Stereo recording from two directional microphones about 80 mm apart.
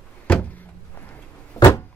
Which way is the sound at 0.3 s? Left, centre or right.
Left.